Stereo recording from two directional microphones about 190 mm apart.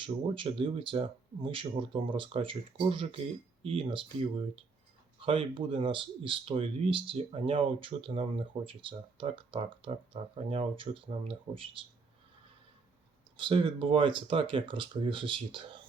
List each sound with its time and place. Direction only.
0.0 s speech: 25° right (ahead or behind)
5.2 s speech: 30° right (ahead or behind)
13.3 s speech: 25° right (ahead or behind)